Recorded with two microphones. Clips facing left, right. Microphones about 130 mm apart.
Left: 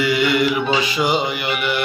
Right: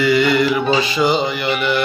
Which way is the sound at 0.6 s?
35° right (ahead or behind).